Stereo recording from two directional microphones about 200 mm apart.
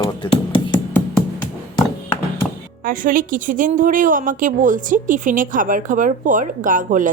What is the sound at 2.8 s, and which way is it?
A woman's voice, 45° right (ahead or behind).